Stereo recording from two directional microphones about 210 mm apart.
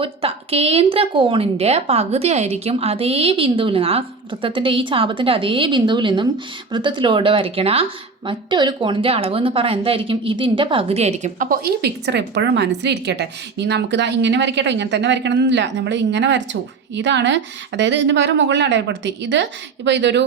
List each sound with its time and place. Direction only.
0.0 s a woman's voice: 25° right (ahead or behind); by 20.2 s 55° right (ahead or behind)